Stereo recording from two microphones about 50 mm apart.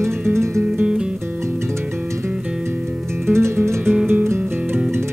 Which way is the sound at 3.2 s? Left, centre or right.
Right.